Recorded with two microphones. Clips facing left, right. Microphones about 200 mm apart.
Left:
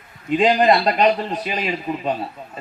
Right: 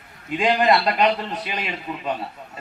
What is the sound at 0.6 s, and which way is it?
A man's voice, 30° left (ahead or behind).